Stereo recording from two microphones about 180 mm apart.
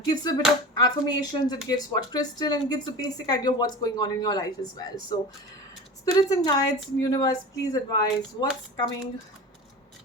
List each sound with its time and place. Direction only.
0.1 s speech: 20° left (ahead or behind)